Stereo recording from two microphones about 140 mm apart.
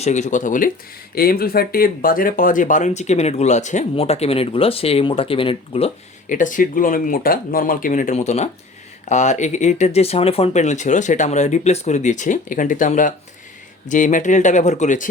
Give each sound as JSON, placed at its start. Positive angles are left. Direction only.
{"t": 0.0, "sound": "speech", "side_deg": 60}
{"t": 1.1, "sound": "speech", "side_deg": 90}
{"t": 6.2, "sound": "speech", "side_deg": 65}